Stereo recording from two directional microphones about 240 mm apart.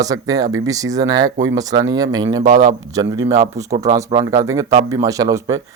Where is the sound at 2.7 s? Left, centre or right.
Centre.